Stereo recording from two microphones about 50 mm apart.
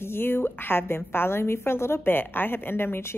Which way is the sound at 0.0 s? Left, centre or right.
Left.